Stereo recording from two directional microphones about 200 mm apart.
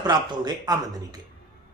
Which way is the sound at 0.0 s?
20° right (ahead or behind).